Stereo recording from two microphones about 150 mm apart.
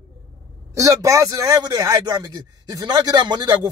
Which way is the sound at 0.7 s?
20° right (ahead or behind).